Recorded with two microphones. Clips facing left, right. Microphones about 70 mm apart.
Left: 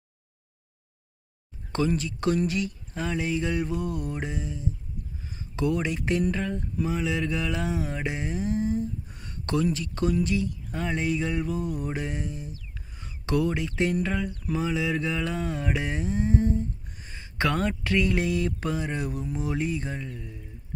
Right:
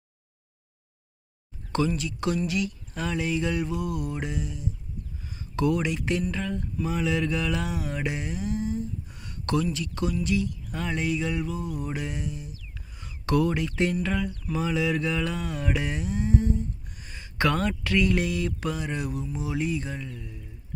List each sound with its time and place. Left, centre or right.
1.9 s mantra: left
5.2 s speech: left
6.3 s mantra: left
11.9 s speech: left
14.0 s mantra: left
19.2 s mantra: left